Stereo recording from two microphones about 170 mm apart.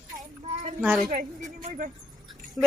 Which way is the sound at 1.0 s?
50° right (ahead or behind).